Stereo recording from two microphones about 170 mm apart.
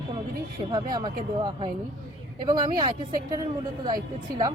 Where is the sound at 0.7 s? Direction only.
25° right (ahead or behind).